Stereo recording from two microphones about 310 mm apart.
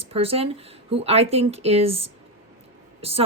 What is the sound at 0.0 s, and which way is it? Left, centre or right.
Speech, centre.